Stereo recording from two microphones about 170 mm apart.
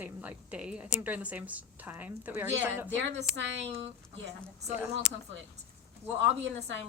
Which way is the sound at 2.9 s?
90° right.